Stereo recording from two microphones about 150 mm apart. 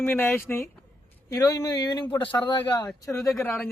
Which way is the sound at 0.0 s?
15° left (ahead or behind).